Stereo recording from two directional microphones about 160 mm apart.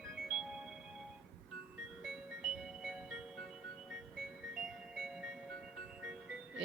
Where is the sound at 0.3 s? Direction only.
Centre (ahead or behind).